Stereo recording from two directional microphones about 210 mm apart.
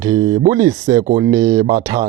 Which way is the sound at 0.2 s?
35° right (ahead or behind).